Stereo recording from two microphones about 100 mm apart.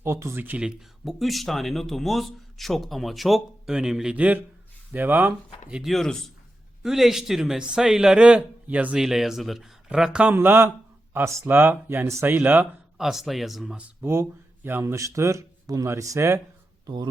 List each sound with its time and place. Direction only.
0.0 s speech: 25° right (ahead or behind)
1.0 s a man's voice: centre (ahead or behind)
5.9 s a man's voice: 5° left (ahead or behind)
10.3 s speech: 20° right (ahead or behind)
13.0 s a man's voice: 5° right (ahead or behind)
13.7 s speech: 25° right (ahead or behind)
16.8 s speech: 45° right (ahead or behind)